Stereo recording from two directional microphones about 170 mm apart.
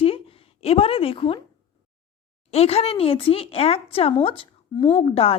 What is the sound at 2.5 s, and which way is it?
A woman's voice, 35° left (ahead or behind).